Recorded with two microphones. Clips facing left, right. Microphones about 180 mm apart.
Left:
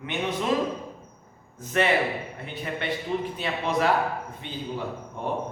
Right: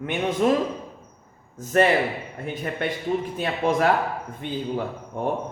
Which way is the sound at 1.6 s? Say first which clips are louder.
Right 4 dB; 45° right (ahead or behind).